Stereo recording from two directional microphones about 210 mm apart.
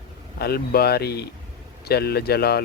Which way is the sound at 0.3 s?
50° left (ahead or behind).